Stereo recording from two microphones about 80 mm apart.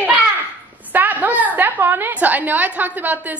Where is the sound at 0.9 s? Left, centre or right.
Right.